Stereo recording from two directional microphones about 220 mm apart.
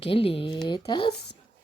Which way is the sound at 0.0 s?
25° left (ahead or behind).